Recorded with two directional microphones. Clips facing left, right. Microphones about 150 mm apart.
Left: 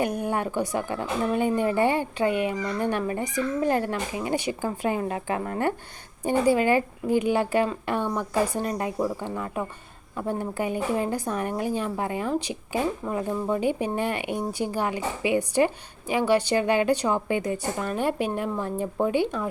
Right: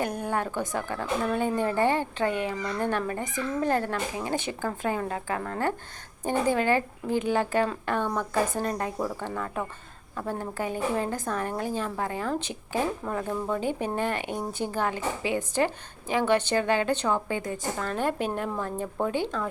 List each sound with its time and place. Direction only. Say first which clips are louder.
0.0 s a woman's voice: left 3 dB; 15° left (ahead or behind)